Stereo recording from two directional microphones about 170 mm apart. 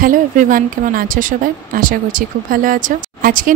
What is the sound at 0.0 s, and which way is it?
A woman's voice, 50° right (ahead or behind).